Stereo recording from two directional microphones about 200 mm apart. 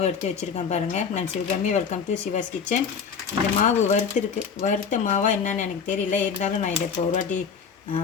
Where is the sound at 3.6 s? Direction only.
40° left (ahead or behind).